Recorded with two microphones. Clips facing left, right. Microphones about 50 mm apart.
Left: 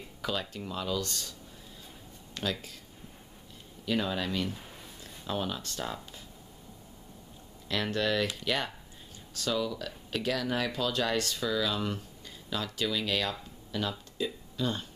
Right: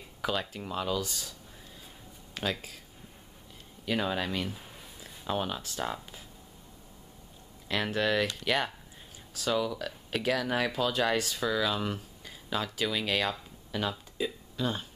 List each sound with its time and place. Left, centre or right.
0.2 s speech: centre
2.3 s speech: centre
3.8 s speech: centre
4.5 s a sound: centre
5.2 s speech: centre
7.6 s speech: centre